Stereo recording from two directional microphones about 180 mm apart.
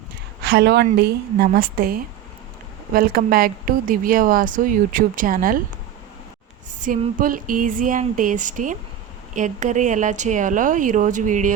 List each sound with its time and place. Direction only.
0.4 s a woman's voice: 70° right (ahead or behind); by 5.5 s 50° right (ahead or behind)
6.7 s speech: 50° right (ahead or behind)